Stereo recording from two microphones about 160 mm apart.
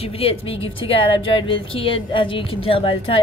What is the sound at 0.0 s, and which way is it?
Speech, 35° left (ahead or behind).